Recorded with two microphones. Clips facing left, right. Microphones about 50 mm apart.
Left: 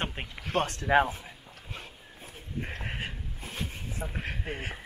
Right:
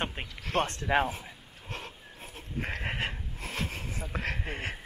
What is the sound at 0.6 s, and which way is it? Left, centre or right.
Speech, right.